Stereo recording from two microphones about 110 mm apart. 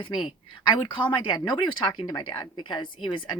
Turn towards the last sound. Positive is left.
turn(degrees=45)  # may be behind; listen again after turning